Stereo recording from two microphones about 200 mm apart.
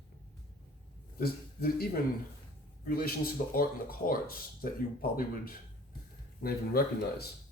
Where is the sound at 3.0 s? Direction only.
45° left (ahead or behind).